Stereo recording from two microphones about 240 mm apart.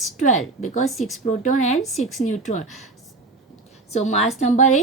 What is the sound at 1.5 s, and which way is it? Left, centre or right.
A woman's voice, left.